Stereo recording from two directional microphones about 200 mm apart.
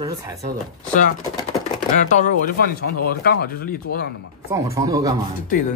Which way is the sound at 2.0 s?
45° left (ahead or behind).